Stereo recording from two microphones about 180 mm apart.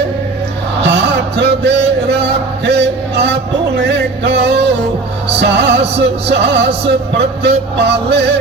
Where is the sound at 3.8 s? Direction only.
70° right (ahead or behind).